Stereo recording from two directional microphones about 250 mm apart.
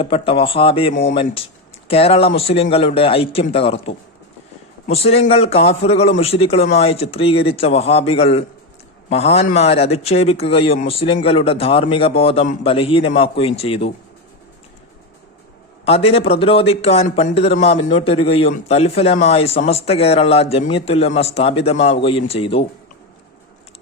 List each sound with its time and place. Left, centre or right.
0.0 s a man's voice: left
15.8 s a man's voice: left